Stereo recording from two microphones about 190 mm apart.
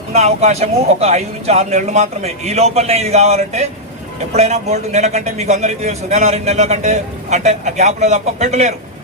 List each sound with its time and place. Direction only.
0.1 s a man's voice: 35° right (ahead or behind)